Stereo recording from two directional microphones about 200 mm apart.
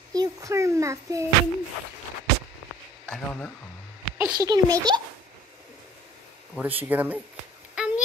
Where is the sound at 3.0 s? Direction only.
10° left (ahead or behind).